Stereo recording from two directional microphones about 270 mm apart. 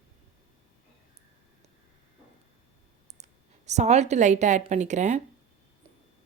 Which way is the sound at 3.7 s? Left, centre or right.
Right.